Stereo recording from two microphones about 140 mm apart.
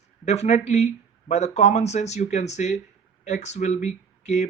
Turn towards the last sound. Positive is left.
turn(degrees=55)  # may be behind; listen again after turning